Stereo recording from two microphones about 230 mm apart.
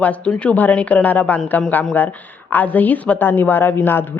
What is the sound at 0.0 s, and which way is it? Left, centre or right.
Speech, centre.